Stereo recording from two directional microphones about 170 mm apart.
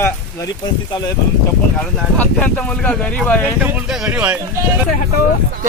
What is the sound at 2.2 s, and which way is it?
Speech, 10° left (ahead or behind).